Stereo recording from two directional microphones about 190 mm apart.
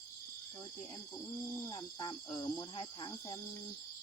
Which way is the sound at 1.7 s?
25° left (ahead or behind).